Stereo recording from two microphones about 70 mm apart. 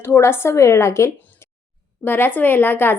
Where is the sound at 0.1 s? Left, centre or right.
Left.